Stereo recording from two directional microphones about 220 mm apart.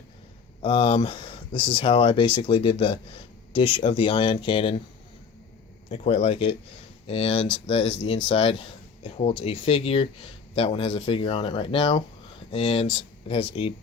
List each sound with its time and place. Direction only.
0.6 s speech: 25° left (ahead or behind)
5.9 s speech: 30° left (ahead or behind)